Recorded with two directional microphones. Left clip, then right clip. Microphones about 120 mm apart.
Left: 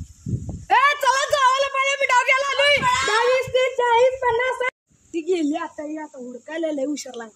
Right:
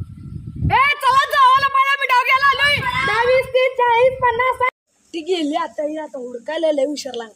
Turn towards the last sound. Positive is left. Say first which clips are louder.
# right 6 dB
turn(degrees=30)  # may be behind; listen again after turning